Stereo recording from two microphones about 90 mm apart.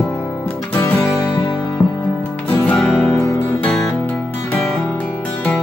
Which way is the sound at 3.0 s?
30° left (ahead or behind).